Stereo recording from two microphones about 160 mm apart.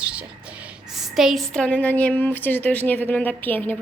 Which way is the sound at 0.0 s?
5° right (ahead or behind).